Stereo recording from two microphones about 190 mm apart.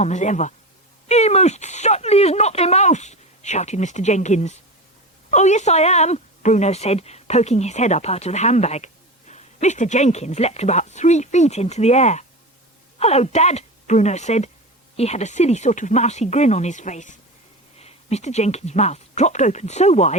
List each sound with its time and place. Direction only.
0.0 s a woman's voice: 40° left (ahead or behind)